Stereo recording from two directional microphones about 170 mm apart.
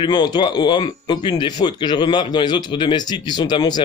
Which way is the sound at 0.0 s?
25° left (ahead or behind).